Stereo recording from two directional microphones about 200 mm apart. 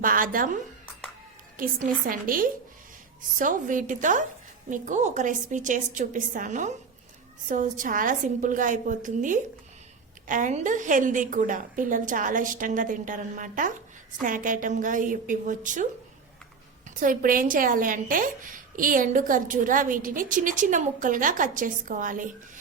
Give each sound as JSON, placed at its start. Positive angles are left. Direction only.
{"t": 0.0, "sound": "a woman's voice", "side_deg": -45}
{"t": 17.0, "sound": "a woman's voice", "side_deg": -45}